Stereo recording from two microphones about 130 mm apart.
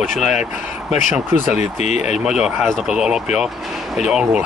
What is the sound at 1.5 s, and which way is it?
Speech, 60° left (ahead or behind).